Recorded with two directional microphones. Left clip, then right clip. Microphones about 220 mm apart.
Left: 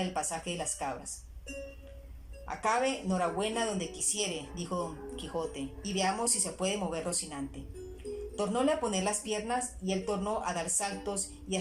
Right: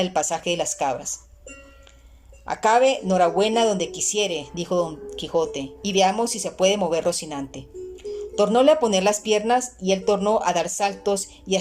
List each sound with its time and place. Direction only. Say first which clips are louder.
0.1 s a woman's voice: right 12 dB; 45° right (ahead or behind)
2.5 s a woman's voice: right 12 dB; 40° right (ahead or behind)